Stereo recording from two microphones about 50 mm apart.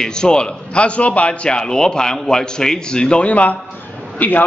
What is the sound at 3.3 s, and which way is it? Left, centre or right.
A man's voice, left.